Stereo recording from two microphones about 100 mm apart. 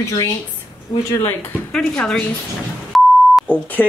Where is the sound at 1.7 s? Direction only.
10° left (ahead or behind).